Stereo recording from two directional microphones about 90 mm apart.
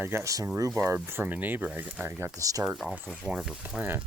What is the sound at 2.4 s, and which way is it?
Speech, 40° right (ahead or behind).